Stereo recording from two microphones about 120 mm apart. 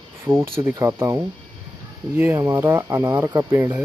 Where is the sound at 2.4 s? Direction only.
25° right (ahead or behind).